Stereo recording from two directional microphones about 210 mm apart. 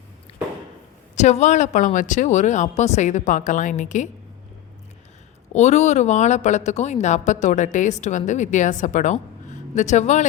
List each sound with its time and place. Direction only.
0.3 s a sound: 30° left (ahead or behind)
1.1 s a woman's voice: 35° left (ahead or behind)
5.5 s a woman's voice: 35° left (ahead or behind)